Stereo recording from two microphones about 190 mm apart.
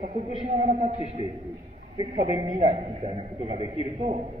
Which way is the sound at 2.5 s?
30° right (ahead or behind).